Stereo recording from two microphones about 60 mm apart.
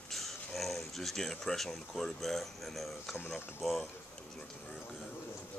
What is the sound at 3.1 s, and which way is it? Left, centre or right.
Speech, left.